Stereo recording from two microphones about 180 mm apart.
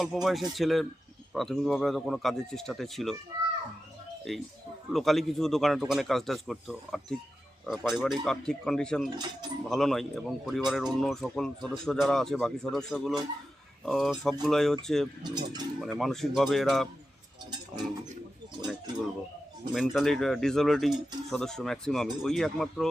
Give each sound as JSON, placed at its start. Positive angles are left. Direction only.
{"t": 0.0, "sound": "speech", "side_deg": 0}
{"t": 4.3, "sound": "speech", "side_deg": 0}
{"t": 9.0, "sound": "speech", "side_deg": -25}
{"t": 9.6, "sound": "speech", "side_deg": 0}
{"t": 15.2, "sound": "speech", "side_deg": -25}
{"t": 15.8, "sound": "speech", "side_deg": 0}
{"t": 19.7, "sound": "speech", "side_deg": 0}